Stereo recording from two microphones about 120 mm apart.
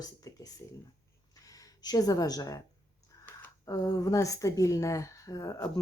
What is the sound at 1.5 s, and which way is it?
Speech, 30° left (ahead or behind).